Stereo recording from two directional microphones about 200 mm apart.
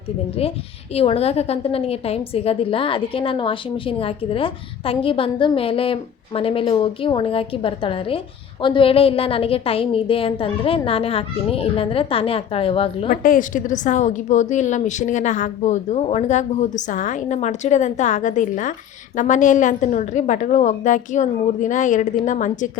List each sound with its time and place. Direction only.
0.9 s a woman's voice: 30° left (ahead or behind)
13.2 s a woman's voice: 40° left (ahead or behind)